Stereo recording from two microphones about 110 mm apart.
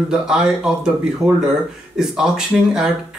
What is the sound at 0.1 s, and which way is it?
Speech, 5° right (ahead or behind).